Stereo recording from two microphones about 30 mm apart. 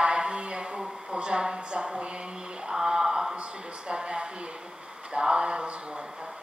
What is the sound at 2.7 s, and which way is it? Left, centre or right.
Mantra, centre.